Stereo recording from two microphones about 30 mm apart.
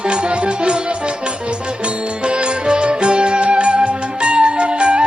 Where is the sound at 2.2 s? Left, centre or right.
Right.